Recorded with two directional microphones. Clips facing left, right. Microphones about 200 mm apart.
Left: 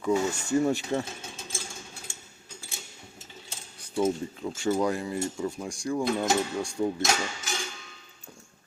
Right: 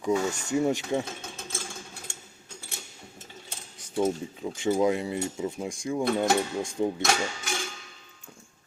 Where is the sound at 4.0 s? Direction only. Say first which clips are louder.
Even; 15° right (ahead or behind).